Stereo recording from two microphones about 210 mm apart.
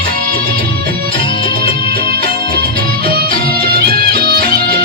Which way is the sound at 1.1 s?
25° left (ahead or behind).